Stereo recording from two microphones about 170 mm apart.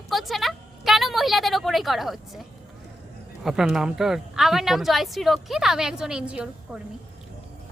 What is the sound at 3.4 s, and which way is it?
Speech, 5° right (ahead or behind).